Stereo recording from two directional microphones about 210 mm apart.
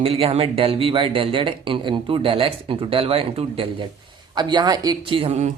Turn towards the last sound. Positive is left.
turn(degrees=-30)  # may be behind; listen again after turning